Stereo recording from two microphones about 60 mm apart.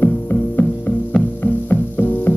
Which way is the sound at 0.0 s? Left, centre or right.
Left.